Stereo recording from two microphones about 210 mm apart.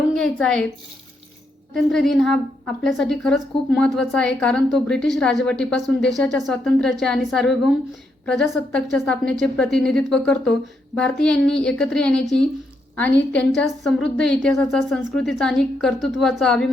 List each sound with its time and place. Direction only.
0.2 s a woman's voice: 5° left (ahead or behind)
1.7 s a woman's voice: centre (ahead or behind)